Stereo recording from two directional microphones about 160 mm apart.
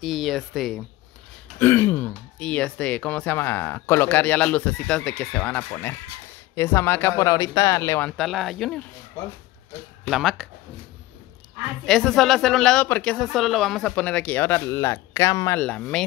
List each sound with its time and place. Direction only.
0.0 s speech: centre (ahead or behind)
1.6 s speech: 15° left (ahead or behind)
8.2 s speech: centre (ahead or behind)
9.2 s speech: 20° left (ahead or behind)
10.0 s speech: centre (ahead or behind)
11.8 s speech: centre (ahead or behind); by 15.6 s 20° left (ahead or behind)
15.6 s speech: 5° left (ahead or behind)